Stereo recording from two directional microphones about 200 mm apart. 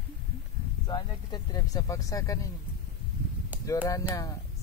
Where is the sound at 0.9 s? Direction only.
20° left (ahead or behind).